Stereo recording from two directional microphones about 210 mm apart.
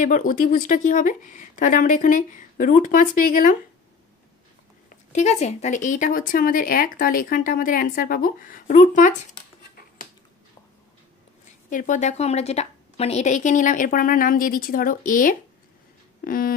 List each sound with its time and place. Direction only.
0.0 s a woman's voice: 40° left (ahead or behind)
4.8 s a woman's voice: 30° left (ahead or behind)
11.7 s a woman's voice: 40° left (ahead or behind)